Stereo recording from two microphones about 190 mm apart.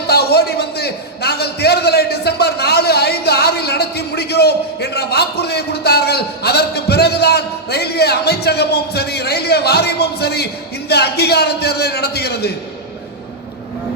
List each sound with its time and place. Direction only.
0.1 s a man's voice: 60° left (ahead or behind)